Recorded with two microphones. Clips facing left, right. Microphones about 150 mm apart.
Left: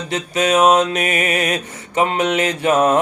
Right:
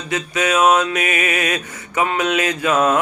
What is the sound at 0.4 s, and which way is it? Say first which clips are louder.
Mantra: left 2 dB; 40° left (ahead or behind).